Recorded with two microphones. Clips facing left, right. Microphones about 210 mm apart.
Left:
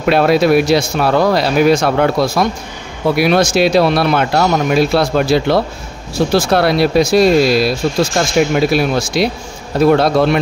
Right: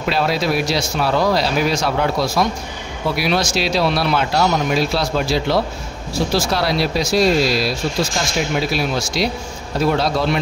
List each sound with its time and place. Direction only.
0.0 s speech: 55° left (ahead or behind)